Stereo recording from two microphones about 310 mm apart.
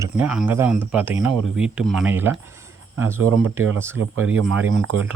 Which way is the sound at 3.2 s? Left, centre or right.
Right.